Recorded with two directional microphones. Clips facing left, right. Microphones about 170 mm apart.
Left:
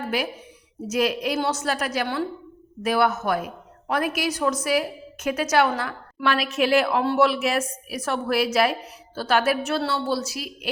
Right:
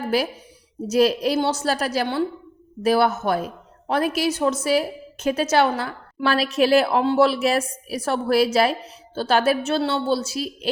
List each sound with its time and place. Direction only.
0.1 s a woman's voice: 35° right (ahead or behind)